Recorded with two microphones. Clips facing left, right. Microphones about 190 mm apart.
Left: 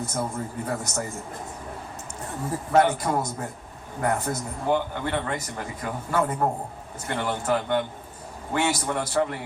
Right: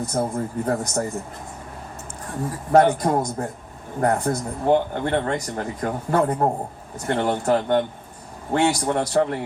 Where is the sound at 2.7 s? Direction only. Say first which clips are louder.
Right 5 dB; 45° right (ahead or behind).